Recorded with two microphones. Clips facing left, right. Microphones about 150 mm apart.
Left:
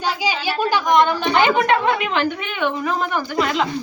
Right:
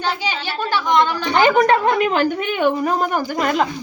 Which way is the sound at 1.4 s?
40° right (ahead or behind).